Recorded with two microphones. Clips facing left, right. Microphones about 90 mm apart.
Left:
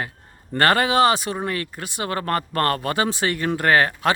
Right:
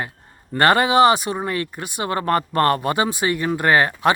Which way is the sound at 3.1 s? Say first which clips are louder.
Right 1 dB; 15° right (ahead or behind).